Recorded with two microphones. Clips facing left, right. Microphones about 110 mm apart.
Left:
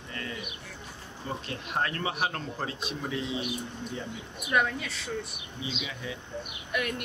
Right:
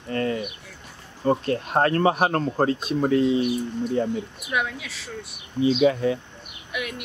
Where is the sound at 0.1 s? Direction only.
50° right (ahead or behind).